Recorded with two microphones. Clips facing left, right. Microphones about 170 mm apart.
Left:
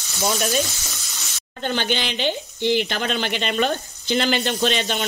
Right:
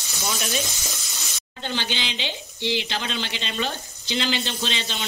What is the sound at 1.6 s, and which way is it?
Speech, 55° left (ahead or behind).